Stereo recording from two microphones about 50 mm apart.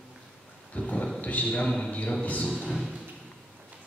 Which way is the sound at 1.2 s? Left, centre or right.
Left.